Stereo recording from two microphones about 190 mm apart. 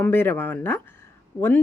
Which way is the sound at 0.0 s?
10° left (ahead or behind).